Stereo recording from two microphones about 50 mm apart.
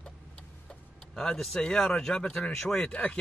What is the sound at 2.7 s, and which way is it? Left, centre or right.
Speech, left.